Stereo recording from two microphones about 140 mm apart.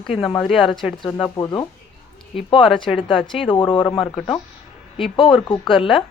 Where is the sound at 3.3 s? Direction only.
35° left (ahead or behind).